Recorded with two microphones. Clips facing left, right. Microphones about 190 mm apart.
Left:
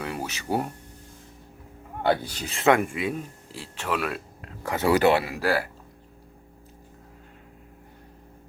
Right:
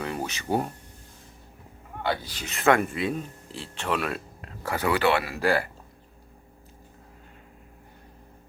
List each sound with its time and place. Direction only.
0.0 s a sound: 5° left (ahead or behind)
2.0 s speech: 45° left (ahead or behind)
2.5 s speech: 20° left (ahead or behind); by 4.4 s 5° left (ahead or behind)
4.6 s speech: 20° left (ahead or behind)
4.9 s speech: 40° left (ahead or behind)
5.4 s speech: 5° left (ahead or behind)